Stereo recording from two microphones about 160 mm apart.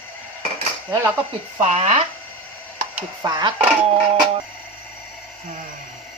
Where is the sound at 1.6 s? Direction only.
45° right (ahead or behind).